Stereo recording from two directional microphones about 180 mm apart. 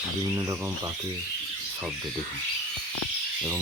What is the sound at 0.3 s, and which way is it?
Speech, 15° right (ahead or behind).